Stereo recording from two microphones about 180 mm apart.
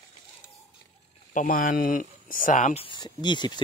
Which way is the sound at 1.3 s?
45° left (ahead or behind).